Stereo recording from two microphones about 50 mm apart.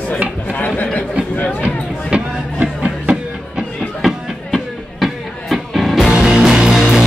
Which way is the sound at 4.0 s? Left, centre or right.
Centre.